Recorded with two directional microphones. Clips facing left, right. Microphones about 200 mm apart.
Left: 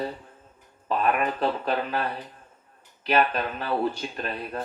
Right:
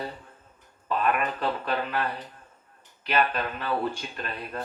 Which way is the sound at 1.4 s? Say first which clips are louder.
Left 3 dB; 35° left (ahead or behind).